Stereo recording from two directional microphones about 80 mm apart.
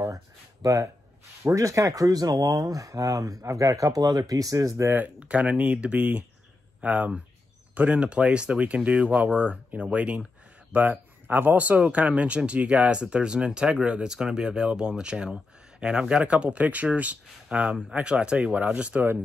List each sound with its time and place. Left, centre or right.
0.0 s a sound: right
1.5 s speech: right
4.8 s speech: right